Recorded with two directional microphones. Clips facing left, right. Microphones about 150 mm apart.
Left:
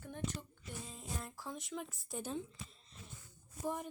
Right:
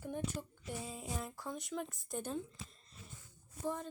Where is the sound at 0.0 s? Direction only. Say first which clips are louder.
Right 3 dB; 10° right (ahead or behind).